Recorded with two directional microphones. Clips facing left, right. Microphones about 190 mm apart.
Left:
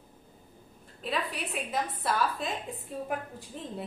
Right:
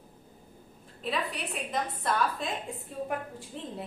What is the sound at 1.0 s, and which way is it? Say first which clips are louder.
A woman's voice: even; centre (ahead or behind).